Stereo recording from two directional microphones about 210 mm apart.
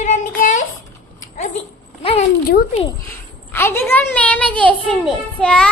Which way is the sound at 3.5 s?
10° left (ahead or behind).